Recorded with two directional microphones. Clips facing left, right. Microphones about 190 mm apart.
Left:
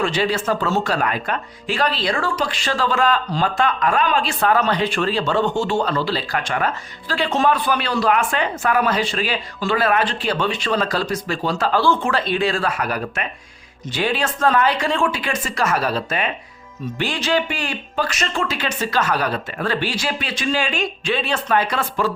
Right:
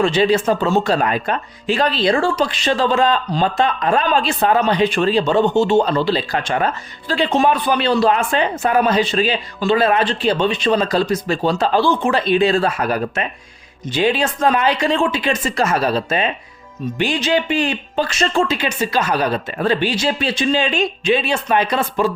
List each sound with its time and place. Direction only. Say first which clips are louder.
0.0 s a man's voice: right 6 dB; 20° right (ahead or behind)
18.5 s a man's voice: right 3 dB; 15° right (ahead or behind)